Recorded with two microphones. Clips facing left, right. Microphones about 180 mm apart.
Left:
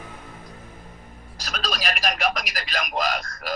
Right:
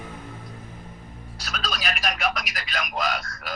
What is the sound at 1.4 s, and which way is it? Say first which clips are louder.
A man's voice: left 2 dB; 35° left (ahead or behind).